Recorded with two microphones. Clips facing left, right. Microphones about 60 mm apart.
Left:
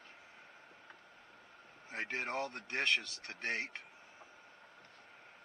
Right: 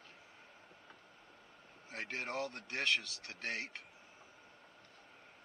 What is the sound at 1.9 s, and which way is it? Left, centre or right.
Speech, left.